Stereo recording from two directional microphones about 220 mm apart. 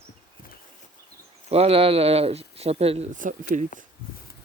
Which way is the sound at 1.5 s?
25° right (ahead or behind).